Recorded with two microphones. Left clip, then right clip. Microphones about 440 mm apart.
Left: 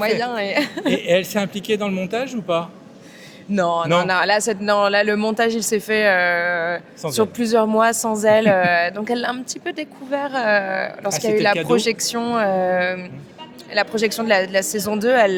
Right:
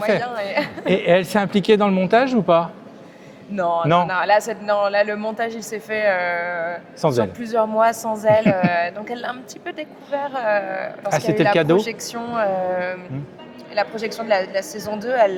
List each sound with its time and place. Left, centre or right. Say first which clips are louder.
0.2 s speech: left 2 dB; left
0.9 s speech: right 3 dB; right
3.5 s speech: even; left